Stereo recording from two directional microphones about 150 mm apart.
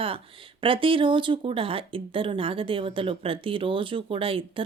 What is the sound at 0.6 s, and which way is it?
Speech, 35° right (ahead or behind).